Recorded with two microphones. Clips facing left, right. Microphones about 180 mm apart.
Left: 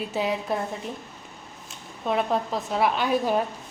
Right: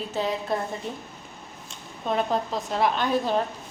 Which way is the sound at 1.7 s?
5° left (ahead or behind).